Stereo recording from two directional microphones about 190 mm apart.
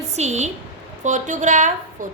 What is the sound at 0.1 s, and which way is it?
A woman's voice, 35° right (ahead or behind).